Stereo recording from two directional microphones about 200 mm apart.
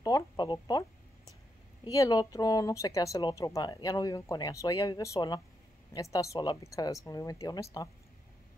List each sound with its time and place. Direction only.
0.0 s speech: 20° left (ahead or behind)
1.9 s speech: 20° left (ahead or behind)